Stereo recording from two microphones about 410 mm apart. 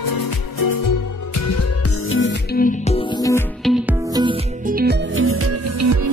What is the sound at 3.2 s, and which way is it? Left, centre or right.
Music, centre.